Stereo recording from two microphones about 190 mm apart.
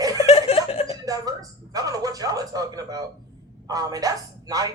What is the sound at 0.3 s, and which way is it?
Snicker, 30° left (ahead or behind).